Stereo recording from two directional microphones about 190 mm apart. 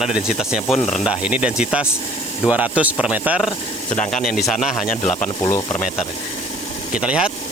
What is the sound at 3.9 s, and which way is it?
Speech, 40° left (ahead or behind).